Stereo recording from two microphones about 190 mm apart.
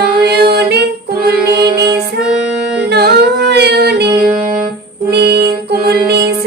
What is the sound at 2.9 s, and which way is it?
Female singing, 55° right (ahead or behind).